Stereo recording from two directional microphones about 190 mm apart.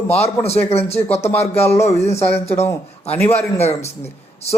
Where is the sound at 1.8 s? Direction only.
35° left (ahead or behind).